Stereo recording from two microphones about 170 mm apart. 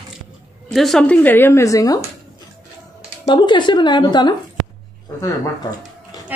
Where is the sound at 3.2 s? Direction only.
25° left (ahead or behind).